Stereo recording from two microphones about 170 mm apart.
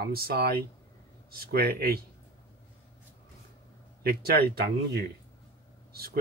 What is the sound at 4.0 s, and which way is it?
Speech, 65° right (ahead or behind).